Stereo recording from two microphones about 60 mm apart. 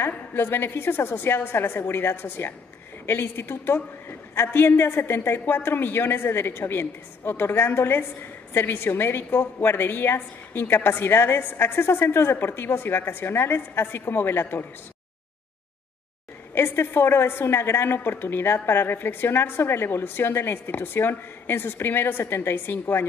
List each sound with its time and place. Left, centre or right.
0.1 s a woman's voice: left
16.5 s a woman's voice: left